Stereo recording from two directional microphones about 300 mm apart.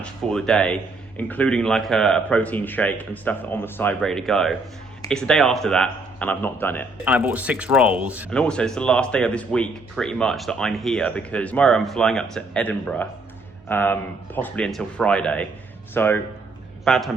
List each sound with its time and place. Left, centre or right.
0.0 s speech: centre
7.0 s speech: centre